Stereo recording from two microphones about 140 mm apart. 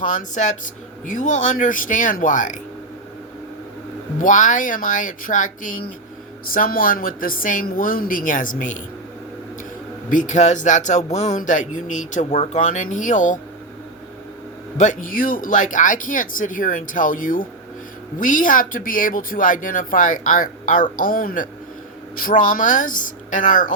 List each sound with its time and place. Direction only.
0.0 s speech: 60° left (ahead or behind)
4.2 s speech: 65° left (ahead or behind)
6.5 s a woman's voice: 90° left; by 8.8 s 65° left (ahead or behind)
10.1 s speech: 60° left (ahead or behind)
14.8 s speech: 70° left (ahead or behind); by 21.4 s 90° left
22.2 s speech: 70° left (ahead or behind)